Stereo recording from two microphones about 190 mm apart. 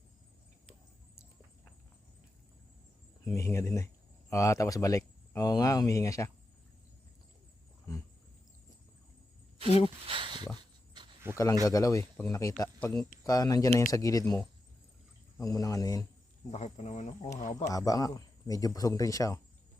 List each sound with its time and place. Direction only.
3.2 s speech: 15° left (ahead or behind)
9.6 s speech: 30° left (ahead or behind)
10.1 s a sound: 25° right (ahead or behind)
11.2 s a sound: 10° right (ahead or behind)
11.6 s speech: 20° left (ahead or behind)
15.4 s speech: 20° left (ahead or behind)
16.5 s speech: 35° left (ahead or behind)
17.7 s speech: 20° left (ahead or behind)